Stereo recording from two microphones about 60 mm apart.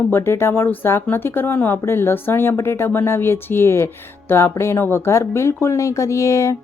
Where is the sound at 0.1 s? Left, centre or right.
Left.